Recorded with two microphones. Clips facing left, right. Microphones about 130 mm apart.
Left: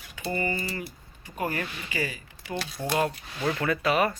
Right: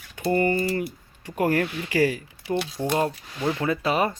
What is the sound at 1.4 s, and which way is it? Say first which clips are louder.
Speech: right 8 dB; 75° right (ahead or behind).